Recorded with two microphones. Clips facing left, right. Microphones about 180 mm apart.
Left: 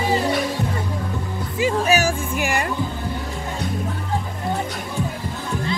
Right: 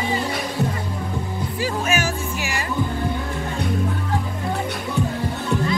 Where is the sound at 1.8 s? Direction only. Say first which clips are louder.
Left 3 dB; 40° left (ahead or behind).